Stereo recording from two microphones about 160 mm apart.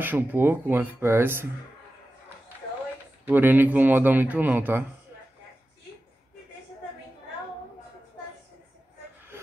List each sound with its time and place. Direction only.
0.0 s speech: 10° right (ahead or behind)
3.3 s speech: 10° right (ahead or behind)
9.3 s a sound: 15° right (ahead or behind)